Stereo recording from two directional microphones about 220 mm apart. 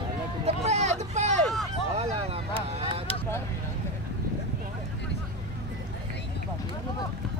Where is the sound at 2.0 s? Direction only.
25° right (ahead or behind).